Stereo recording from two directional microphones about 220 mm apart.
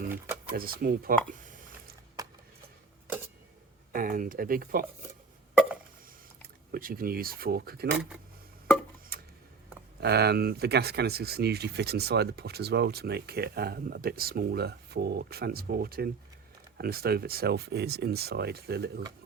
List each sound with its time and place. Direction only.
0.5 s speech: 40° right (ahead or behind)
2.2 s a sound: 15° right (ahead or behind)
3.9 s speech: 40° right (ahead or behind)
6.7 s speech: 40° right (ahead or behind)
9.1 s a sound: 45° right (ahead or behind)
10.0 s speech: 50° right (ahead or behind)